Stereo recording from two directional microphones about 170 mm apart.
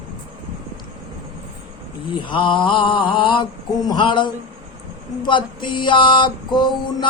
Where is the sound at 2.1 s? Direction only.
30° left (ahead or behind).